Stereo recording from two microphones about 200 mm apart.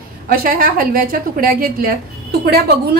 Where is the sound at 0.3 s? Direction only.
45° right (ahead or behind).